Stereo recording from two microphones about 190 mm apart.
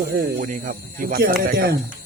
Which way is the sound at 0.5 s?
45° right (ahead or behind).